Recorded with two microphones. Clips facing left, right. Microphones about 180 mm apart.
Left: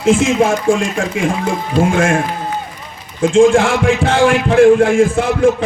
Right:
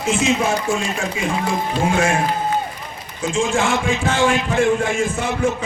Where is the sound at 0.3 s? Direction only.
50° left (ahead or behind).